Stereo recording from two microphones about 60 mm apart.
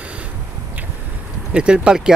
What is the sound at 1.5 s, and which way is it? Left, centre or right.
Speech, centre.